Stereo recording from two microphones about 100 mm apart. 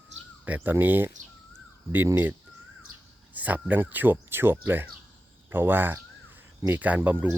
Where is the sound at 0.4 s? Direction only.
15° right (ahead or behind).